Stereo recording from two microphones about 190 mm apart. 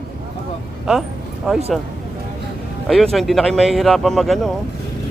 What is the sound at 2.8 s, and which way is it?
Speech, centre (ahead or behind).